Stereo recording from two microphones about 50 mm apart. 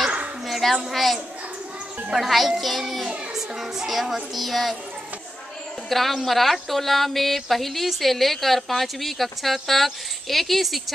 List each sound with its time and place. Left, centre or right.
0.5 s a child's voice: centre
5.9 s speech: centre